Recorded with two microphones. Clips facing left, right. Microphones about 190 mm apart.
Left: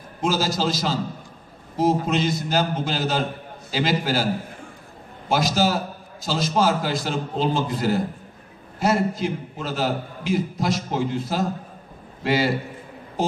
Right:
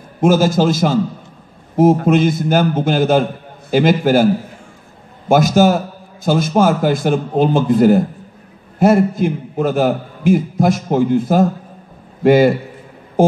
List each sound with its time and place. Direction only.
0.2 s a man's voice: 50° right (ahead or behind)
5.3 s a man's voice: 50° right (ahead or behind)